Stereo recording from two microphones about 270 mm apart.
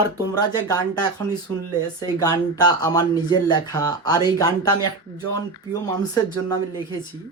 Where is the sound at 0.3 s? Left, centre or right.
Centre.